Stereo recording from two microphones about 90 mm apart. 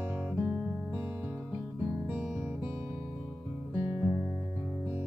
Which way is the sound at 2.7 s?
25° right (ahead or behind).